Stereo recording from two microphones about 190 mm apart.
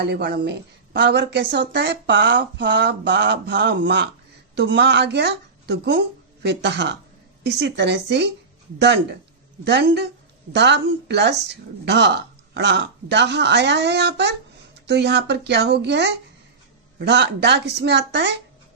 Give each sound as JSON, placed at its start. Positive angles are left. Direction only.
{"t": 0.0, "sound": "speech", "side_deg": -60}
{"t": 9.6, "sound": "speech", "side_deg": -65}